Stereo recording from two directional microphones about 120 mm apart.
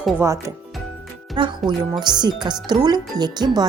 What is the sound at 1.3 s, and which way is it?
Speech, 40° right (ahead or behind).